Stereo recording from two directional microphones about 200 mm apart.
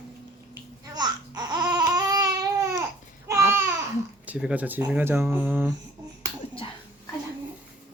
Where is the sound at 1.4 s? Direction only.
20° right (ahead or behind).